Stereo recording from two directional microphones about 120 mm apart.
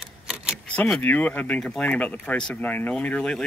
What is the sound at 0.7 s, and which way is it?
Speech, 5° left (ahead or behind).